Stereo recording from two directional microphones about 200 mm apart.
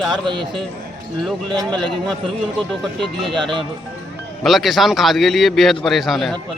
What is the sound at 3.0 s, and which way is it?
A man's voice, centre (ahead or behind).